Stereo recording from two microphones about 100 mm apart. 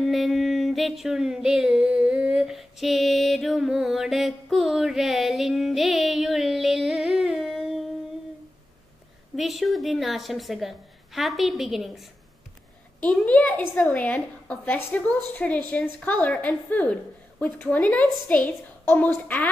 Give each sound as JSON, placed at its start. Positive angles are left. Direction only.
{"t": 0.0, "sound": "a sound", "side_deg": 0}
{"t": 9.4, "sound": "a woman's voice", "side_deg": 0}
{"t": 13.0, "sound": "a woman's voice", "side_deg": 15}